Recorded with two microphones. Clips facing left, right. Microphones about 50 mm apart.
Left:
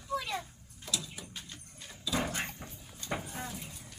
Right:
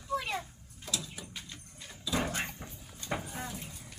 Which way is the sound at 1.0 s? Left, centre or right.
Centre.